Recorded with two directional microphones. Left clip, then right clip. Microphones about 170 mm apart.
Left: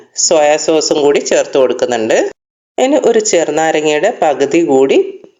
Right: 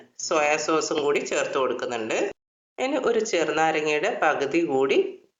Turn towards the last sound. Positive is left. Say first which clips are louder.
# left 12 dB
turn(degrees=35)  # may be behind; listen again after turning